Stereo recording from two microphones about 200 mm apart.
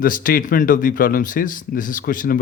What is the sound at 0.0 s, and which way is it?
A man's voice, 45° left (ahead or behind).